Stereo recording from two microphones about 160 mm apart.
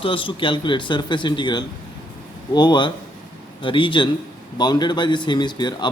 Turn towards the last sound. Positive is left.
turn(degrees=25)  # may be behind; listen again after turning